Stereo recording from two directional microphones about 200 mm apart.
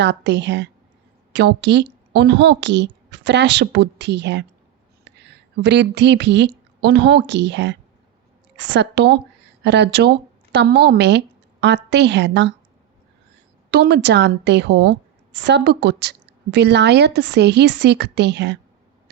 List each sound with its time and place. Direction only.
0.0 s a woman's voice: 60° right (ahead or behind)
13.7 s a woman's voice: 55° right (ahead or behind)